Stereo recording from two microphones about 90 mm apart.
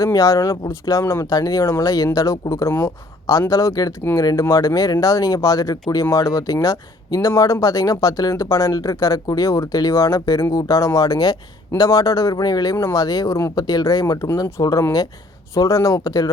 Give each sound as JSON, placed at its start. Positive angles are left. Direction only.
{"t": 0.0, "sound": "speech", "side_deg": 35}